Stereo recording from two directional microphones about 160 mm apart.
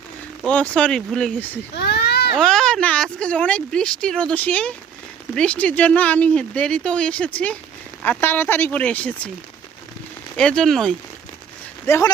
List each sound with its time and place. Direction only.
0.4 s speech: 5° left (ahead or behind)
1.7 s a sound: 90° left
2.4 s speech: 5° left (ahead or behind)
10.3 s speech: 5° left (ahead or behind)
11.9 s speech: 15° left (ahead or behind)